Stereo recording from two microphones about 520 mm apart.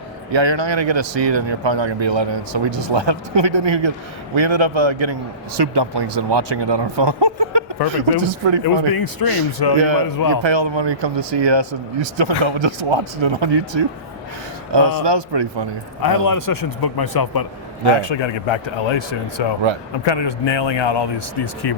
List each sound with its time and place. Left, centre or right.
0.3 s speech: right
5.5 s speech: right
8.6 s a man's voice: left
9.7 s speech: right
10.2 s a man's voice: left
10.4 s speech: right
16.0 s a man's voice: left
18.0 s speech: left